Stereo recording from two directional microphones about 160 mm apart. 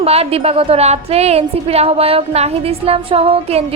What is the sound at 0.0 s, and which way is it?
A woman's voice, 40° right (ahead or behind).